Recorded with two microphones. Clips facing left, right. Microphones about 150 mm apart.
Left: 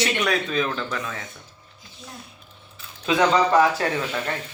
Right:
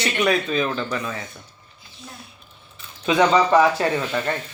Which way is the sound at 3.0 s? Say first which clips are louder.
Right 2 dB; 5° right (ahead or behind).